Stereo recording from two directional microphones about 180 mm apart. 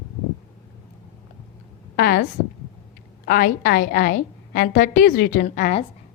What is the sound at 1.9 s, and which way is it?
Speech, 60° left (ahead or behind).